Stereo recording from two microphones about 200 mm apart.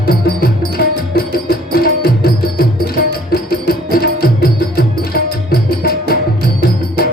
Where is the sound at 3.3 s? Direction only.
50° left (ahead or behind).